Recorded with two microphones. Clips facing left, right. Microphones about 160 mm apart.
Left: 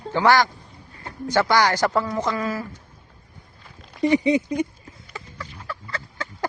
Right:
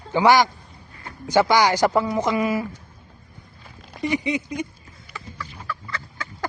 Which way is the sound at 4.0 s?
25° left (ahead or behind).